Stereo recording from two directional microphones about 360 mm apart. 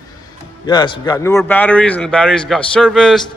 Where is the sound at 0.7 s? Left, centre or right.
Centre.